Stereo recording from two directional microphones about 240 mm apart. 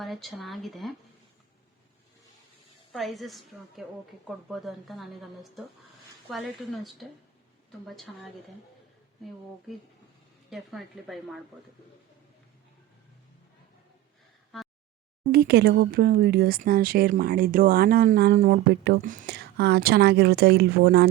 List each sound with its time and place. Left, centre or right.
0.0 s speech: centre
2.9 s speech: centre
10.5 s speech: centre
14.5 s a sound: centre
15.3 s speech: right